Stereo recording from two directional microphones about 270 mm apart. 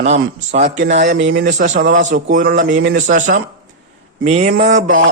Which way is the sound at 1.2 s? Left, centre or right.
Right.